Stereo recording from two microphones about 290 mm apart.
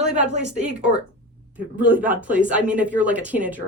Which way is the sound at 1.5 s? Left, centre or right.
Centre.